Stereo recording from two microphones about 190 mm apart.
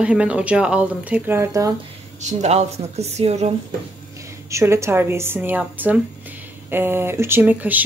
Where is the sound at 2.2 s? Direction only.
35° right (ahead or behind).